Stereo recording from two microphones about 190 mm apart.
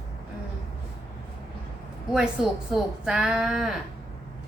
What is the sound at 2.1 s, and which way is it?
Speech, 5° right (ahead or behind).